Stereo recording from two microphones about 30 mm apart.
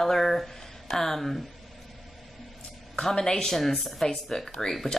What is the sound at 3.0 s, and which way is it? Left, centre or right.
Speech, left.